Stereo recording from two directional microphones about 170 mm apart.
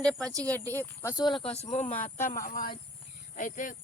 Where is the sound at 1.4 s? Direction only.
35° left (ahead or behind).